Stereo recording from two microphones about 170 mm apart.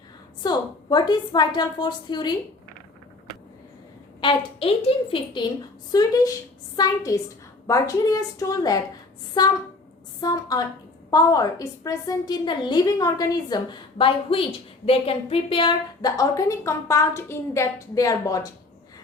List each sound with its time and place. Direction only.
0.4 s a woman's voice: 25° left (ahead or behind)
4.2 s a woman's voice: 30° left (ahead or behind)